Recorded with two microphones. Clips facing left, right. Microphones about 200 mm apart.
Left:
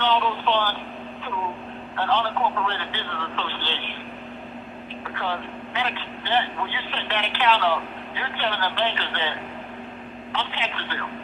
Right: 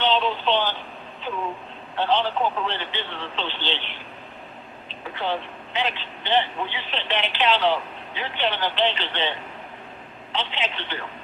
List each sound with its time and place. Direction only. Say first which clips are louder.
0.0 s radio: right 1 dB; 20° right (ahead or behind)
2.0 s speech: right 1 dB; 20° right (ahead or behind)
5.1 s speech: right 2 dB; 20° right (ahead or behind)
10.3 s speech: right 1 dB; 20° right (ahead or behind)